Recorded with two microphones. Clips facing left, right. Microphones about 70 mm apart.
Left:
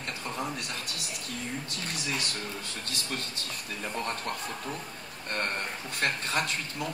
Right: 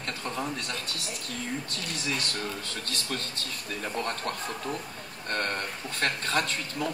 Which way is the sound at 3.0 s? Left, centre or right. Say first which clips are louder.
Right 2 dB; right.